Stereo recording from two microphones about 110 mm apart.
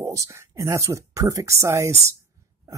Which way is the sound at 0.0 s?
30° right (ahead or behind).